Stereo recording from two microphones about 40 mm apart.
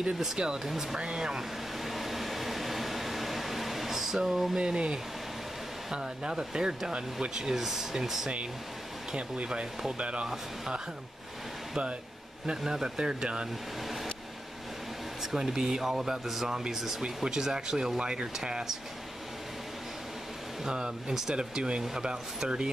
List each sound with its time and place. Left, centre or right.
0.4 s speech: right
1.9 s a sound: centre
4.6 s speech: centre
9.1 s speech: right
12.4 s speech: centre
15.3 s speech: centre
20.6 s speech: right
21.4 s speech: right